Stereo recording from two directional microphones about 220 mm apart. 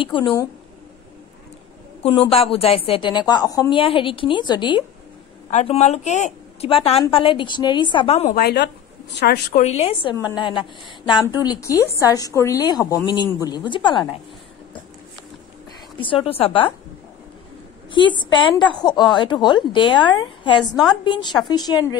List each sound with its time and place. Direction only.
0.0 s a woman's voice: 20° left (ahead or behind)
2.0 s a woman's voice: 25° left (ahead or behind)
5.5 s a woman's voice: 30° left (ahead or behind)
8.4 s a woman's voice: 45° left (ahead or behind)
9.6 s a woman's voice: 30° left (ahead or behind)
16.0 s a woman's voice: 25° left (ahead or behind)
18.2 s a woman's voice: 20° left (ahead or behind)